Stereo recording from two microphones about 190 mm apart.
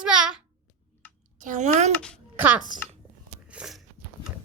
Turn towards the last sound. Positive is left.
turn(degrees=-5)  # may be behind; listen again after turning